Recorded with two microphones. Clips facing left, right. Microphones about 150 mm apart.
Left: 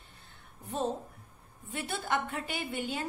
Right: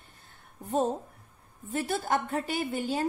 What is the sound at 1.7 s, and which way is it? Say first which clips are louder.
A woman's voice: right 5 dB; 40° right (ahead or behind).